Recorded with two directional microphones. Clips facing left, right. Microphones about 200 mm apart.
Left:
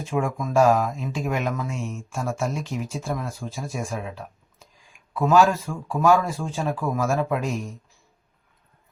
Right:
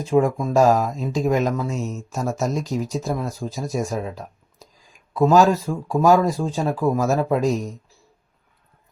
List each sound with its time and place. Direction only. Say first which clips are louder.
0.0 s speech: right 7 dB; 35° right (ahead or behind)